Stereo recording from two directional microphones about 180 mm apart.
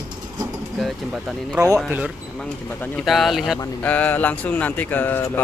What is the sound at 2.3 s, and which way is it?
Speech, 5° left (ahead or behind).